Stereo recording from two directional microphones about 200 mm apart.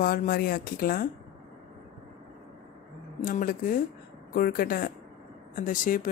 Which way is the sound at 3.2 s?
45° left (ahead or behind).